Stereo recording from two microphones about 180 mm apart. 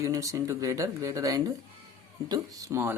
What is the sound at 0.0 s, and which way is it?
Speech, 15° right (ahead or behind).